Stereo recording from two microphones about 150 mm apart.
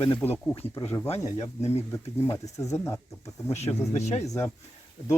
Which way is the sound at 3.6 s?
45° left (ahead or behind).